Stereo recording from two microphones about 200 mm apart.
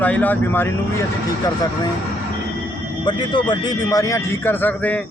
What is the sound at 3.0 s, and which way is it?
Speech, 20° left (ahead or behind).